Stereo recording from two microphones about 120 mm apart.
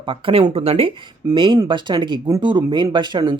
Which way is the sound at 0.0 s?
45° right (ahead or behind).